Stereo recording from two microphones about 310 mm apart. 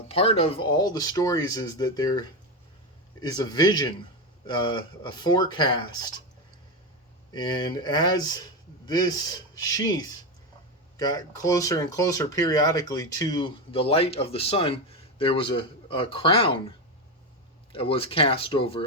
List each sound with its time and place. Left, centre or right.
0.1 s speech: centre
7.3 s speech: centre
9.6 s speech: centre